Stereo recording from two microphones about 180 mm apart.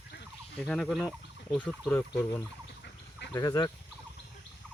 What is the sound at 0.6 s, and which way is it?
Speech, 5° left (ahead or behind).